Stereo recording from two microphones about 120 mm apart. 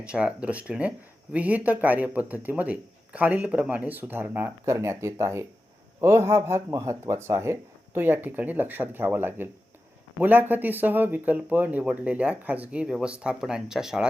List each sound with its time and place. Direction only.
0.0 s speech: 10° right (ahead or behind)